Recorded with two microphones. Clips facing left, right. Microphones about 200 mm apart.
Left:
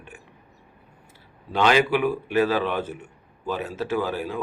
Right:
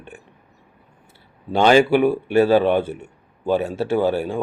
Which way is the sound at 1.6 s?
40° right (ahead or behind).